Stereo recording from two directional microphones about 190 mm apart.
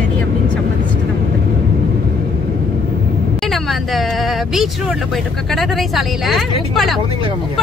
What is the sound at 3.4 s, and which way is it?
Speech, centre (ahead or behind).